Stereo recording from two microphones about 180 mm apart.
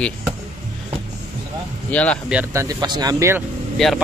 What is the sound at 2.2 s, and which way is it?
Speech, 10° right (ahead or behind).